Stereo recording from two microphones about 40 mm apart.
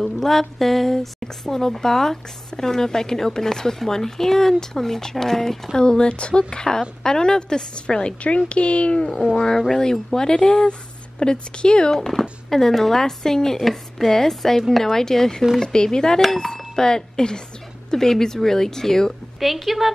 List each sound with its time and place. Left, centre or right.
0.0 s speech: centre
5.8 s speech: left
9.7 s speech: centre
11.9 s speech: centre
19.4 s speech: centre